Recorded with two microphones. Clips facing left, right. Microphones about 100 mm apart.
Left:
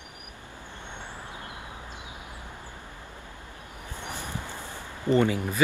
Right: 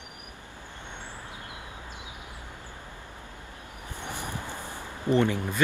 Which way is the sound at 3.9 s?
15° right (ahead or behind).